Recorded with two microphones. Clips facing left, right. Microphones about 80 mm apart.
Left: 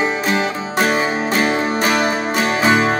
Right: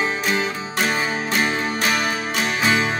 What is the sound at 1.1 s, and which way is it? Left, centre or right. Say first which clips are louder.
Music: left 4 dB; left.